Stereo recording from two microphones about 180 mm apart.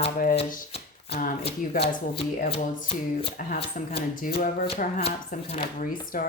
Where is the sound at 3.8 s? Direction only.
45° left (ahead or behind).